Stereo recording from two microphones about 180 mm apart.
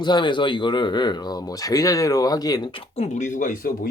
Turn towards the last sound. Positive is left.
turn(degrees=50)  # may be behind; listen again after turning